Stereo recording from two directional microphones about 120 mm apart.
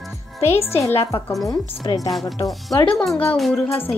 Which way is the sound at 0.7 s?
25° left (ahead or behind).